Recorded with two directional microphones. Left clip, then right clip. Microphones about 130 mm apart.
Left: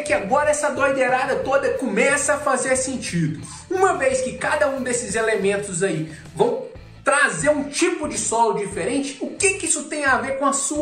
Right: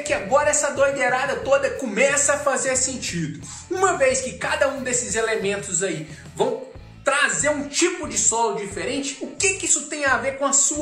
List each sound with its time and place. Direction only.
0.0 s speech: 15° right (ahead or behind)
7.1 s speech: 15° right (ahead or behind)